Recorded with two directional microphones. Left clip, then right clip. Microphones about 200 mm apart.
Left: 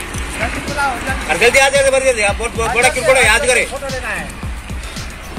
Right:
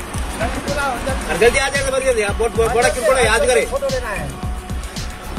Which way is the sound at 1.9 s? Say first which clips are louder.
Left 3 dB; 45° right (ahead or behind).